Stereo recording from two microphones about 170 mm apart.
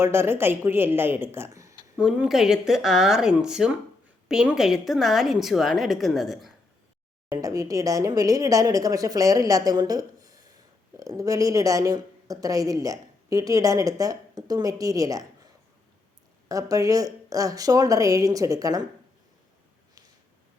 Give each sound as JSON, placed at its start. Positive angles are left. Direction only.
{"t": 0.0, "sound": "speech", "side_deg": -15}
{"t": 2.0, "sound": "a woman's voice", "side_deg": -5}
{"t": 7.3, "sound": "speech", "side_deg": -20}
{"t": 16.5, "sound": "speech", "side_deg": -20}